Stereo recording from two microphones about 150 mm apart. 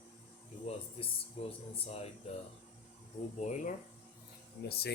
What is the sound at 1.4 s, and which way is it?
Speech, 40° left (ahead or behind).